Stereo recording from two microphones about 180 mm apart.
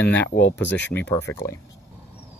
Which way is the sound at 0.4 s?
70° left (ahead or behind).